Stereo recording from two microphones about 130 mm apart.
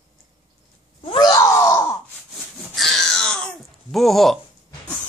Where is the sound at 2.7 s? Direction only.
Centre (ahead or behind).